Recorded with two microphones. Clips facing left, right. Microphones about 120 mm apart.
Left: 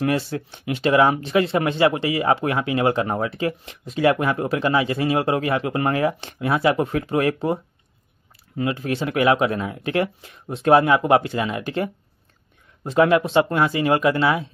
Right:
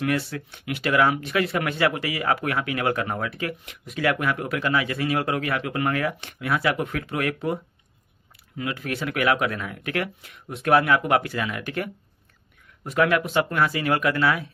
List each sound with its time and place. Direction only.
0.0 s speech: 30° left (ahead or behind)